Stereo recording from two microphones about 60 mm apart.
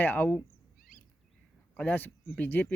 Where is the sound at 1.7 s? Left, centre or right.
Left.